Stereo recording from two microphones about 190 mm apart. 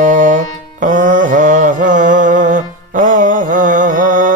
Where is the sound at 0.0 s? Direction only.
45° right (ahead or behind).